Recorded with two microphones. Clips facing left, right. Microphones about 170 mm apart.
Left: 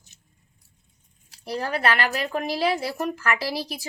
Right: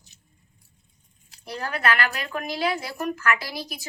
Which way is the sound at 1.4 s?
35° left (ahead or behind).